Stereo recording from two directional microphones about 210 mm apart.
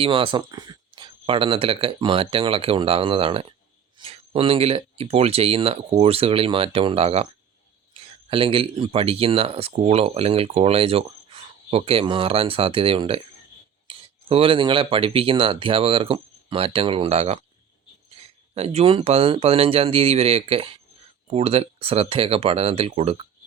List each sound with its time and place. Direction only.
0.0 s speech: 25° right (ahead or behind)
18.5 s speech: 30° right (ahead or behind)